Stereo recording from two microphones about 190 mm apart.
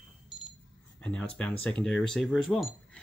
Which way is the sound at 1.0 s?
5° left (ahead or behind).